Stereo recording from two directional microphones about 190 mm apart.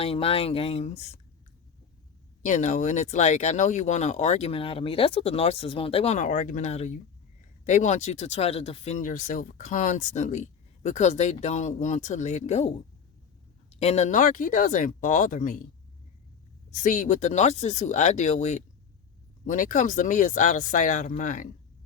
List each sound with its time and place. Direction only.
0.0 s speech: 30° left (ahead or behind)
2.4 s speech: 40° left (ahead or behind)
13.7 s speech: 35° left (ahead or behind)
16.7 s speech: 40° left (ahead or behind)